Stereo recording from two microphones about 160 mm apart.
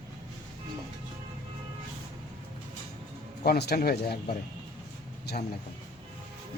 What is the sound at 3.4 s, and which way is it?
Speech, 75° left (ahead or behind).